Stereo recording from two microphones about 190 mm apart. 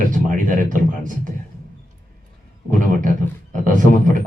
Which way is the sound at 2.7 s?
45° right (ahead or behind).